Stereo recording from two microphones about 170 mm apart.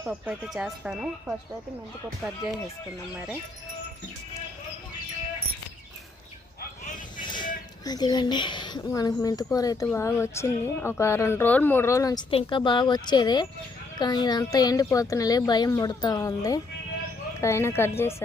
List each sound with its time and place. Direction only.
0.0 s speech: 10° right (ahead or behind)
7.2 s vehicle: 25° left (ahead or behind)
7.9 s speech: 25° left (ahead or behind)
12.3 s speech: 30° left (ahead or behind); by 18.1 s 15° left (ahead or behind)